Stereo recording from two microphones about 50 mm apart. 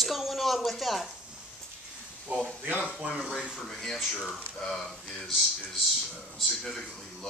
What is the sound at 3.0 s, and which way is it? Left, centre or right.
Speech, right.